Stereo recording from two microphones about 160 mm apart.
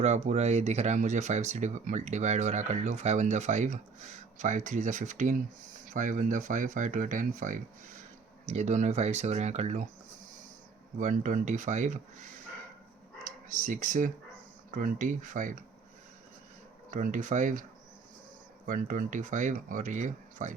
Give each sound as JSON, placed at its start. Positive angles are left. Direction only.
{"t": 0.0, "sound": "speech", "side_deg": -45}
{"t": 10.9, "sound": "speech", "side_deg": -50}
{"t": 13.5, "sound": "speech", "side_deg": -55}
{"t": 16.9, "sound": "speech", "side_deg": -55}